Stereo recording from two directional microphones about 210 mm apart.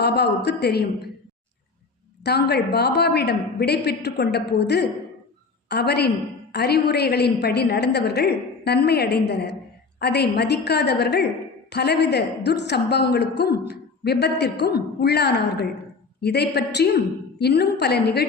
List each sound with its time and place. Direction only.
0.0 s a woman's voice: 50° left (ahead or behind)
2.2 s a woman's voice: 50° left (ahead or behind)